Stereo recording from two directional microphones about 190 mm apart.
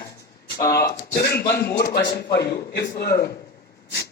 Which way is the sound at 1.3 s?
55° left (ahead or behind).